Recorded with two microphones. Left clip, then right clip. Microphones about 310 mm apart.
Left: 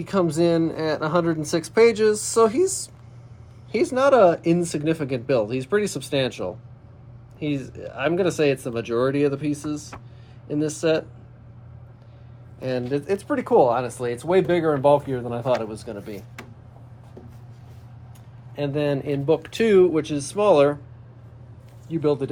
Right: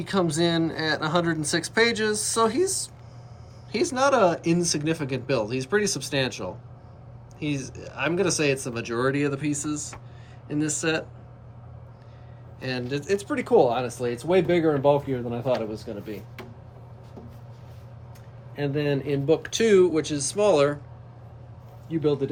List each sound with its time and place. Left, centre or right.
0.1 s speech: centre
3.8 s speech: centre
12.5 s speech: centre
18.5 s speech: centre
21.8 s speech: centre